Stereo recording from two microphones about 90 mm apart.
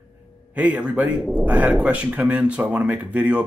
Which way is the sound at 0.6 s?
15° right (ahead or behind).